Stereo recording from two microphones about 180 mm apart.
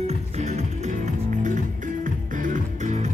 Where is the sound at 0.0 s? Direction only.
40° right (ahead or behind).